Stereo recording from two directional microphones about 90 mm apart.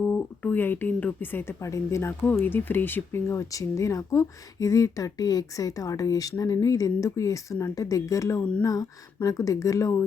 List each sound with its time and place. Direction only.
0.0 s speech: 20° left (ahead or behind)
1.6 s speech: 35° left (ahead or behind)